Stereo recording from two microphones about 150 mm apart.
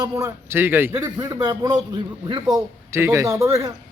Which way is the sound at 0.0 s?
20° right (ahead or behind).